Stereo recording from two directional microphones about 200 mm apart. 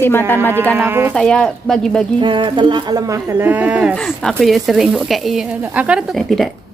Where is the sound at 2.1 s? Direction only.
25° right (ahead or behind).